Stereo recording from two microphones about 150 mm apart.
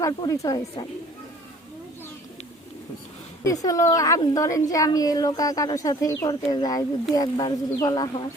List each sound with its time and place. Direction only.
0.0 s a woman's voice: 20° left (ahead or behind)
3.4 s a woman's voice: 20° left (ahead or behind)